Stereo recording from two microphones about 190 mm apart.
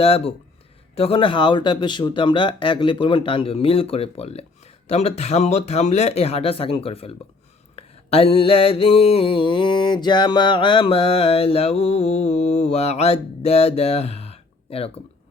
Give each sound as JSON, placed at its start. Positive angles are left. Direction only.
{"t": 0.0, "sound": "mantra", "side_deg": 30}
{"t": 0.9, "sound": "speech", "side_deg": 30}
{"t": 7.8, "sound": "mantra", "side_deg": 30}